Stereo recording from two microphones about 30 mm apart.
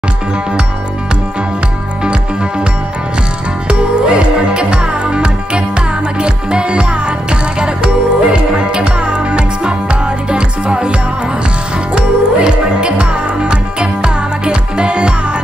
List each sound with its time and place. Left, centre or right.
3.6 s music: right